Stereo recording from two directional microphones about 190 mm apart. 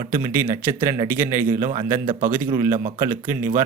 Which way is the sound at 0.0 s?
15° right (ahead or behind).